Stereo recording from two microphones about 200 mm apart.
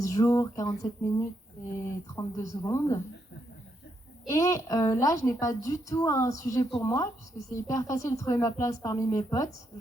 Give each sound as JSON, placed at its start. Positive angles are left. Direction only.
{"t": 0.0, "sound": "a woman's voice", "side_deg": 15}
{"t": 2.1, "sound": "a woman's voice", "side_deg": 15}
{"t": 4.3, "sound": "a woman's voice", "side_deg": 15}